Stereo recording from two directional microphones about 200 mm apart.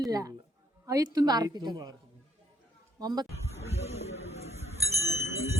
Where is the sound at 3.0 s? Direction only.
20° right (ahead or behind).